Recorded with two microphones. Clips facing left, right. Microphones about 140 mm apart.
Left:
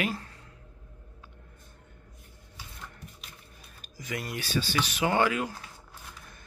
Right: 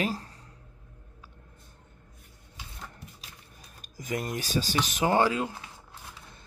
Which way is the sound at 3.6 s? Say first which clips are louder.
Right 3 dB; 45° right (ahead or behind).